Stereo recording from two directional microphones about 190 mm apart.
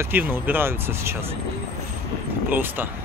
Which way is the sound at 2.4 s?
10° right (ahead or behind).